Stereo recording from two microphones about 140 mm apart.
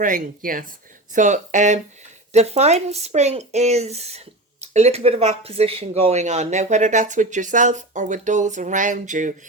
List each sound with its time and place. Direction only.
0.0 s speech: 80° right
1.1 s speech: 65° right (ahead or behind)